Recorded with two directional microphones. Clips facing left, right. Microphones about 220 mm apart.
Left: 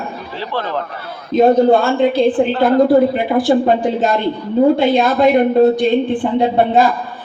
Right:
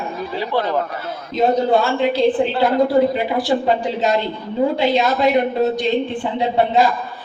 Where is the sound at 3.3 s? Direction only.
50° left (ahead or behind).